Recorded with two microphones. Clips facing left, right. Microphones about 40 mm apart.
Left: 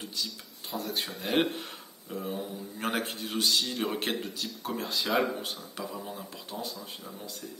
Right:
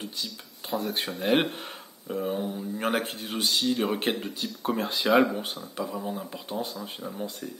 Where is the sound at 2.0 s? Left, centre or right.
Right.